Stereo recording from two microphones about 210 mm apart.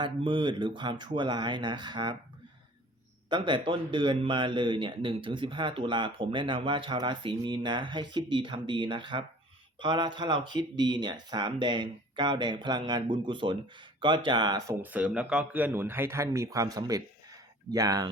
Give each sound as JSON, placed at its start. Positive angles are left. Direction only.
{"t": 0.0, "sound": "speech", "side_deg": -25}
{"t": 3.2, "sound": "speech", "side_deg": -20}